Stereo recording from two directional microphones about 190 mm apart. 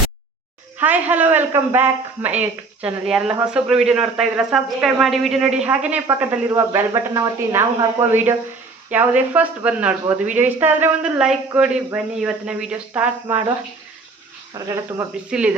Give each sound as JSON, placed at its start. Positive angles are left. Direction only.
{"t": 0.8, "sound": "a man's voice", "side_deg": -10}
{"t": 14.5, "sound": "a man's voice", "side_deg": -20}
{"t": 15.3, "sound": "speech", "side_deg": -5}